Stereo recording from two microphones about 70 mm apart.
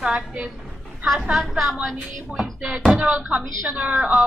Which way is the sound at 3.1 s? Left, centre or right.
Centre.